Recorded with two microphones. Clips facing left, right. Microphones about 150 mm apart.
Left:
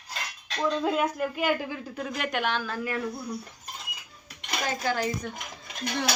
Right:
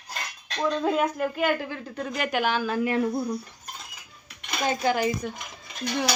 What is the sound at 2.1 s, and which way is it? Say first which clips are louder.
Speech: right 3 dB; centre (ahead or behind).